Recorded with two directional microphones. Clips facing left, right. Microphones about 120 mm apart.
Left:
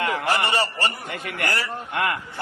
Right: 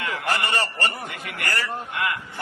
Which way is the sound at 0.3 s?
15° left (ahead or behind).